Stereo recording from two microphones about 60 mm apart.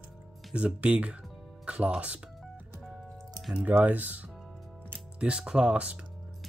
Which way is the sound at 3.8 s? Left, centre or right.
Right.